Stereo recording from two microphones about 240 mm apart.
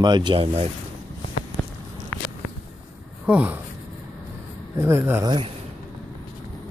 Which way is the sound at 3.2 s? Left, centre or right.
Centre.